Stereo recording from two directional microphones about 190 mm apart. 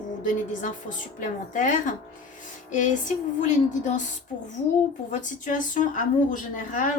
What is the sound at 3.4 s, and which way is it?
Speech, 40° left (ahead or behind).